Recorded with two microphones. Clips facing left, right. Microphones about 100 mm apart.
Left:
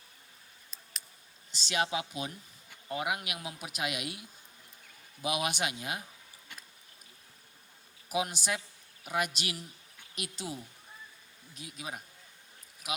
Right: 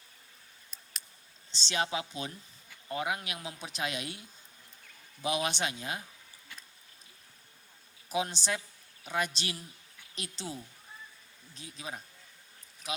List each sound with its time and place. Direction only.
1.5 s speech: 30° right (ahead or behind)
8.1 s speech: 30° right (ahead or behind)